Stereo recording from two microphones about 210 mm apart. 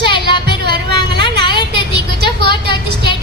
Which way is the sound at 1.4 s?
20° left (ahead or behind).